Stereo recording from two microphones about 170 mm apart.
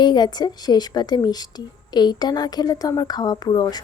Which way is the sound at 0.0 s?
25° left (ahead or behind).